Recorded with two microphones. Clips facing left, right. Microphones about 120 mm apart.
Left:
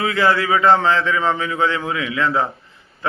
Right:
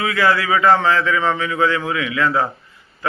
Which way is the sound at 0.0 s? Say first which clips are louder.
Even; 30° left (ahead or behind).